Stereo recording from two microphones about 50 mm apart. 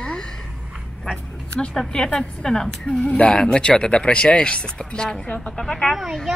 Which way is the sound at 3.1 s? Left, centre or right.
Left.